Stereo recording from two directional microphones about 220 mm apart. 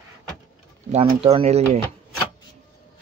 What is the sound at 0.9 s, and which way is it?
Speech, 30° right (ahead or behind).